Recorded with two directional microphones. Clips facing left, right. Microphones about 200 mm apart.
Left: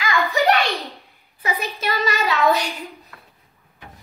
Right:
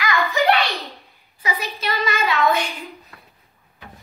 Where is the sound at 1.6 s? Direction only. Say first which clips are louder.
Left 2 dB; 45° left (ahead or behind).